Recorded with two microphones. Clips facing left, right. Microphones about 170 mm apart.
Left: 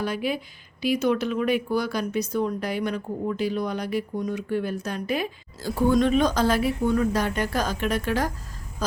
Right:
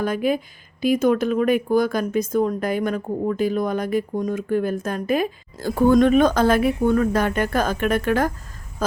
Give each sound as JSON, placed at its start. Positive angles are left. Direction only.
{"t": 0.0, "sound": "speech", "side_deg": -50}